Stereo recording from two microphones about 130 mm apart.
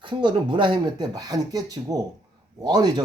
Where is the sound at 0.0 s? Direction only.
35° right (ahead or behind).